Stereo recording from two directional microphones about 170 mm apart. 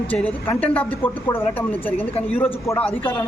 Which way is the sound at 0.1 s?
10° left (ahead or behind).